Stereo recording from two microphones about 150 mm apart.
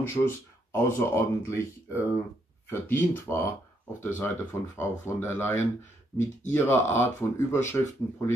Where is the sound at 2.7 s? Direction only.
15° left (ahead or behind).